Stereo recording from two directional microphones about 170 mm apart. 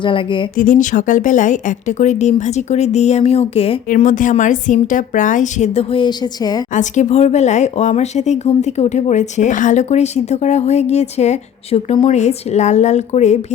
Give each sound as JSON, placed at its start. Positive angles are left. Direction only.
{"t": 0.0, "sound": "speech", "side_deg": 30}
{"t": 0.5, "sound": "speech", "side_deg": 50}
{"t": 3.8, "sound": "speech", "side_deg": 50}
{"t": 6.7, "sound": "speech", "side_deg": 45}